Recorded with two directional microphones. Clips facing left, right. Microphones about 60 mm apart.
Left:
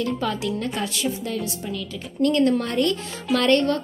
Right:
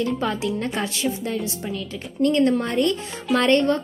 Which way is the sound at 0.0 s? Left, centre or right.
Right.